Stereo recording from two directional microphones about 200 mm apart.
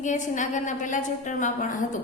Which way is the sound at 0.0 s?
40° left (ahead or behind).